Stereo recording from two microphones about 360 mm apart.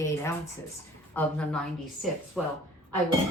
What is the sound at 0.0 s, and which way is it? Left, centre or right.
Speech, centre.